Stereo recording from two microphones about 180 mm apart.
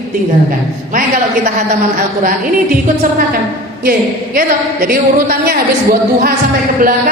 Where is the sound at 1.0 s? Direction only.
50° right (ahead or behind).